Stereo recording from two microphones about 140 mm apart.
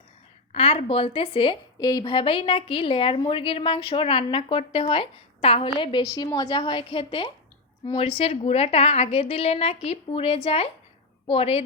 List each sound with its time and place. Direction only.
0.5 s a woman's voice: 45° left (ahead or behind)
6.0 s a woman's voice: 25° left (ahead or behind); by 11.6 s 45° left (ahead or behind)